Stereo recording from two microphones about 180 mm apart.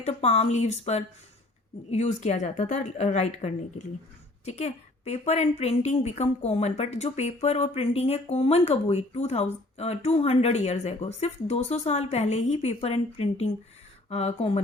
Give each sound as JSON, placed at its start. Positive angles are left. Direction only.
{"t": 0.0, "sound": "a woman's voice", "side_deg": 35}